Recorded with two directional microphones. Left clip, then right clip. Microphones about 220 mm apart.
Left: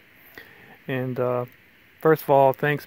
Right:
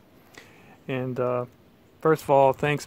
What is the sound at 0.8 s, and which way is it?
Speech, 40° left (ahead or behind).